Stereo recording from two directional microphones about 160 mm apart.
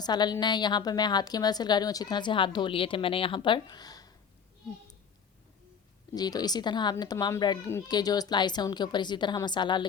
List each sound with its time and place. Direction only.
0.0 s a woman's voice: 25° left (ahead or behind)
6.1 s a woman's voice: 25° left (ahead or behind)